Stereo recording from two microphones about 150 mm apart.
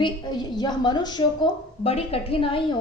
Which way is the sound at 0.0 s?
30° left (ahead or behind).